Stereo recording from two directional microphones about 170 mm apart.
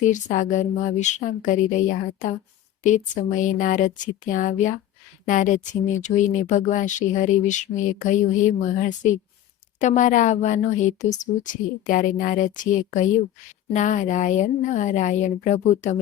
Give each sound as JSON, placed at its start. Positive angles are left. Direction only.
{"t": 0.0, "sound": "speech", "side_deg": 45}